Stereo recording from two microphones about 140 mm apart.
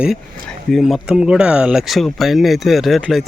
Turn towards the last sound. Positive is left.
turn(degrees=0)  # may be behind; listen again after turning